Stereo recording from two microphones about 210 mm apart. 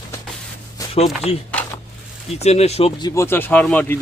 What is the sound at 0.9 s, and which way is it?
Speech, 30° left (ahead or behind).